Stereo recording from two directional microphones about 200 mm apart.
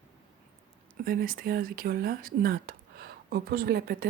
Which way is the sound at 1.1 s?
45° right (ahead or behind).